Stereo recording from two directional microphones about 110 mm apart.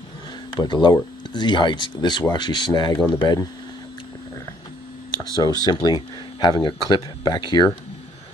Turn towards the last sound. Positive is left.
turn(degrees=45)  # may be behind; listen again after turning